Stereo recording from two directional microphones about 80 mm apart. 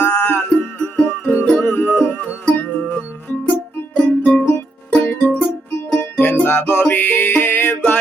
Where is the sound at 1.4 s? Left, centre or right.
Centre.